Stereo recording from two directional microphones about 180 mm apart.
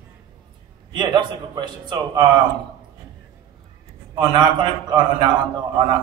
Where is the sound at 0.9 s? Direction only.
25° right (ahead or behind).